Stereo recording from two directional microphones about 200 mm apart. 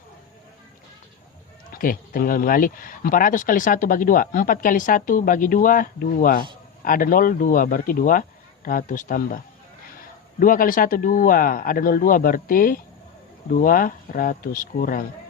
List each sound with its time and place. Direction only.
1.7 s speech: 45° left (ahead or behind)